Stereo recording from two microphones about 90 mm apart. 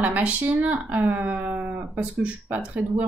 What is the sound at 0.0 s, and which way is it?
A woman's voice, 15° right (ahead or behind).